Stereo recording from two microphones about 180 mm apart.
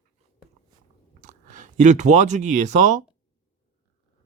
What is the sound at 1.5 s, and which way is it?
A man's voice, 45° right (ahead or behind).